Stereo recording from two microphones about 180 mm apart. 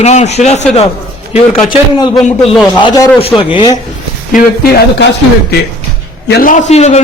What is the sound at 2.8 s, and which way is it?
Speech, 20° left (ahead or behind).